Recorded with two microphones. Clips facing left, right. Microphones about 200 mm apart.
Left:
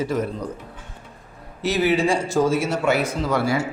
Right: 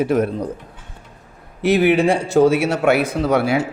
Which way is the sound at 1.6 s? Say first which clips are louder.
Right 5 dB; 55° right (ahead or behind).